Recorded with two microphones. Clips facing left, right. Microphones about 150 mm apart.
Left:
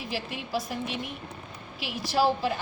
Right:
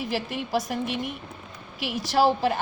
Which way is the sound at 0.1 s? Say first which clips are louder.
Right 3 dB; 55° right (ahead or behind).